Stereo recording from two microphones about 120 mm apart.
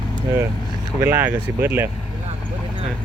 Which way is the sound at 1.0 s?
20° right (ahead or behind).